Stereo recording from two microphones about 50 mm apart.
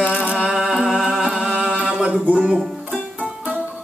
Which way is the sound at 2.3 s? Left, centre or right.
Right.